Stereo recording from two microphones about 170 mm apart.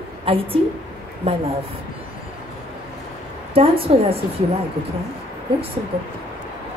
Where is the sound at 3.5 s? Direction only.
35° right (ahead or behind).